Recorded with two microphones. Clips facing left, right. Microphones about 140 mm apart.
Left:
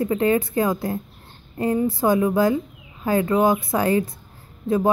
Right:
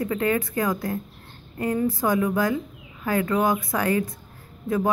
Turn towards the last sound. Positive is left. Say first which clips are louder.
# left 4 dB
turn(degrees=25)  # may be behind; listen again after turning